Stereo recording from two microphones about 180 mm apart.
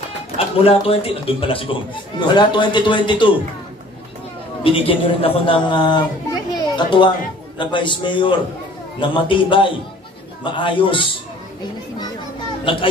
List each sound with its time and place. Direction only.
0.6 s a man's voice: 30° left (ahead or behind)
4.6 s a man's voice: 30° left (ahead or behind)